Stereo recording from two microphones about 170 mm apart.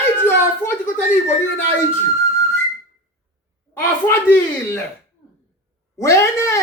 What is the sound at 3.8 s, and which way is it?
A child's voice, 15° left (ahead or behind).